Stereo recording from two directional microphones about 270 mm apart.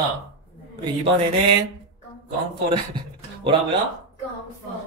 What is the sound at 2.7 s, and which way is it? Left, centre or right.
Speech, centre.